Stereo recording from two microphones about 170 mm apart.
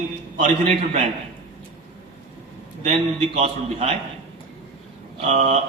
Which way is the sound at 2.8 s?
40° right (ahead or behind).